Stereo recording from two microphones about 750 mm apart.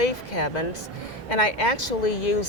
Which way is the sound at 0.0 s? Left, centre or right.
Left.